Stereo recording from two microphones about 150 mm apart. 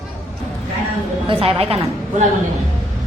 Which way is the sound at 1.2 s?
40° right (ahead or behind).